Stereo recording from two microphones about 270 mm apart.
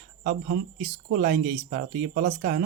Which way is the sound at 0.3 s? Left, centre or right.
Right.